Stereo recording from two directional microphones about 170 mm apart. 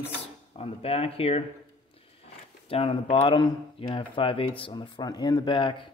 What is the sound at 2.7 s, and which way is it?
Speech, 35° left (ahead or behind).